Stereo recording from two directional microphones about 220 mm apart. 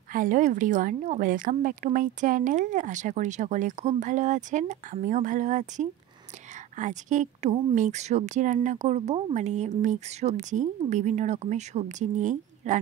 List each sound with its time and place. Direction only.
0.1 s a woman's voice: 35° right (ahead or behind)